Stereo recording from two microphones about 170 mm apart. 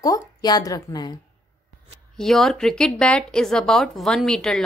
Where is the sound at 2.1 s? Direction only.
Centre (ahead or behind).